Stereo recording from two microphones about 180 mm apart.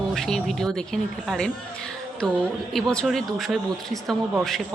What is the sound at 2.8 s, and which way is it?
A woman's voice, 5° left (ahead or behind).